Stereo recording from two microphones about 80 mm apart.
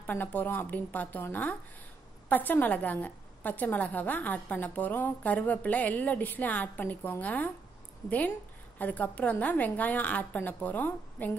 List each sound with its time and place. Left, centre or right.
0.0 s a woman's voice: left
8.7 s a woman's voice: left